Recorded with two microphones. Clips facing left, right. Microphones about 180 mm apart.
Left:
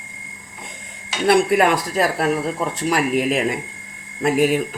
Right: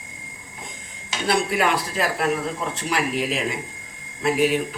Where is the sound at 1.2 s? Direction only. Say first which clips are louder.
Left 6 dB; 50° left (ahead or behind).